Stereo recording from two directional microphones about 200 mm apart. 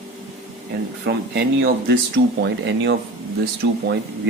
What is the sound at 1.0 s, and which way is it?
Speech, 55° right (ahead or behind).